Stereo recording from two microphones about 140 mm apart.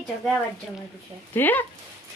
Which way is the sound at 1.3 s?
15° left (ahead or behind).